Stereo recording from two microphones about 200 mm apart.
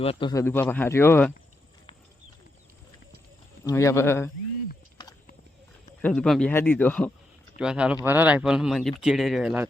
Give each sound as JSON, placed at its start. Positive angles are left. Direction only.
{"t": 0.0, "sound": "a man's voice", "side_deg": 25}
{"t": 0.4, "sound": "speech", "side_deg": 10}
{"t": 3.6, "sound": "speech", "side_deg": 15}
{"t": 5.0, "sound": "clip-clop", "side_deg": 20}
{"t": 6.0, "sound": "speech", "side_deg": 5}
{"t": 7.6, "sound": "speech", "side_deg": -5}